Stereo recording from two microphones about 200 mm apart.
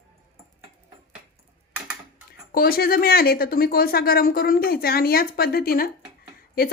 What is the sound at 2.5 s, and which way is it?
Speech, 50° left (ahead or behind).